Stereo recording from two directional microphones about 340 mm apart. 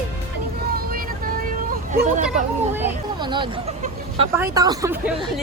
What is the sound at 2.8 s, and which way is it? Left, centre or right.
Speech, centre.